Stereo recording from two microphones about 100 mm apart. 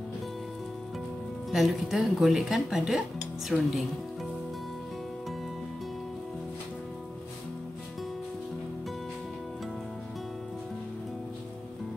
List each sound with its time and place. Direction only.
1.5 s speech: centre (ahead or behind)